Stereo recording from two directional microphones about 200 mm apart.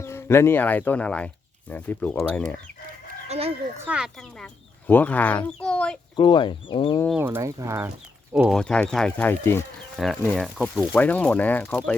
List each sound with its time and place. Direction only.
0.0 s speech: 15° left (ahead or behind)
3.2 s fowl: 30° right (ahead or behind)
3.8 s speech: 5° right (ahead or behind)
4.9 s speech: 10° left (ahead or behind)
6.1 s speech: 25° left (ahead or behind)
7.1 s speech: 10° right (ahead or behind); by 9.6 s 10° left (ahead or behind)
9.9 s speech: centre (ahead or behind)